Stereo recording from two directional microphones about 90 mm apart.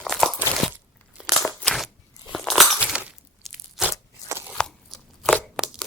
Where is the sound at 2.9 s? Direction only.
10° right (ahead or behind).